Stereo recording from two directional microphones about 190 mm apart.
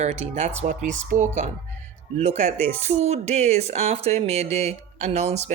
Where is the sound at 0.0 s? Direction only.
35° right (ahead or behind).